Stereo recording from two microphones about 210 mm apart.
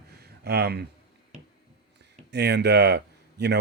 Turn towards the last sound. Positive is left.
turn(degrees=-55)  # may be behind; listen again after turning